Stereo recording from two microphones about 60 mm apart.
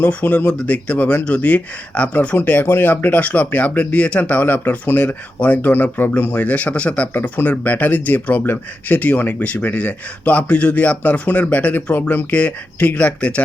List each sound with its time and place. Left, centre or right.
0.0 s speech: left